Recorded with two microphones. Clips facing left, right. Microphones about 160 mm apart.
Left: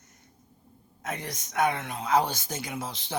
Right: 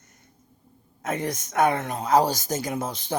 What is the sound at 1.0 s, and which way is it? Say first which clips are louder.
Speech: right 8 dB; 50° right (ahead or behind).